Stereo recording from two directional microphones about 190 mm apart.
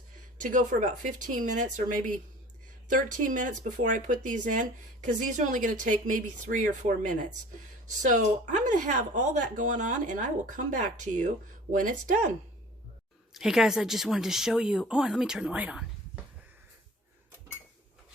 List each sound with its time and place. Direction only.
0.4 s speech: 40° right (ahead or behind)
13.3 s speech: 5° right (ahead or behind)